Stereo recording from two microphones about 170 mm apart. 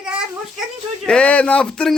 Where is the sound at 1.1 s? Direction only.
5° left (ahead or behind).